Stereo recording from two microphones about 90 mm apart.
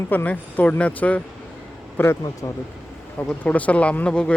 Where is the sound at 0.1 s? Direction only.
20° left (ahead or behind).